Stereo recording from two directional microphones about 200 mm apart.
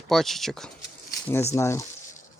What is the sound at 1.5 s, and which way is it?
Speech, 15° left (ahead or behind).